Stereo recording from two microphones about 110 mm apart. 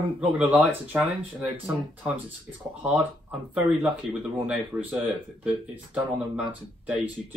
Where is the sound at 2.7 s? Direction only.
10° right (ahead or behind).